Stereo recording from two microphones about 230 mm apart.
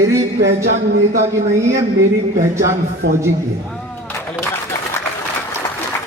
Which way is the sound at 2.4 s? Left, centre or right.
Centre.